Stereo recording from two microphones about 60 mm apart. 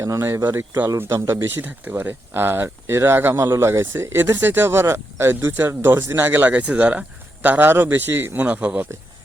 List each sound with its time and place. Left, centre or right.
0.0 s speech: right
4.3 s speech: right
6.0 s speech: right
6.2 s speech: right
8.4 s speech: right